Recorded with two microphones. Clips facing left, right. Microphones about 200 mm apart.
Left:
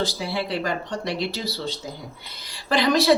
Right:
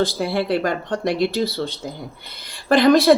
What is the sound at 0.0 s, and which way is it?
Speech, 55° right (ahead or behind).